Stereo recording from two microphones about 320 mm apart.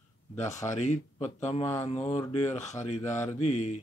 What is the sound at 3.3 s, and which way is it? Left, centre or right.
Speech, left.